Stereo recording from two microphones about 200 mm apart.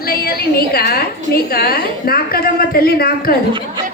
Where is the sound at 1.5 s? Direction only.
50° left (ahead or behind).